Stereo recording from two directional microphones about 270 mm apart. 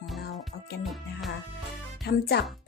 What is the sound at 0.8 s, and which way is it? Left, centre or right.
Speech, centre.